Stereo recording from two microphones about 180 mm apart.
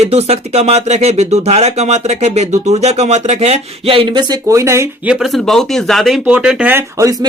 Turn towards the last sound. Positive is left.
turn(degrees=-20)  # may be behind; listen again after turning